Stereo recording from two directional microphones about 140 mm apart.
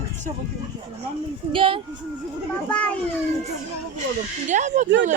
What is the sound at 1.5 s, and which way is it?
Speech, 40° right (ahead or behind).